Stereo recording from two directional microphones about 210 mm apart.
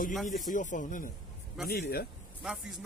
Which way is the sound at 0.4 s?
40° left (ahead or behind).